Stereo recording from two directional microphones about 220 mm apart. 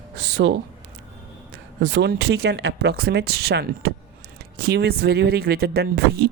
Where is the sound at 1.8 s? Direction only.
50° right (ahead or behind).